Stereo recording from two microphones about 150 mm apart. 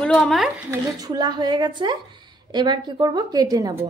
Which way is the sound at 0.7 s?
25° right (ahead or behind).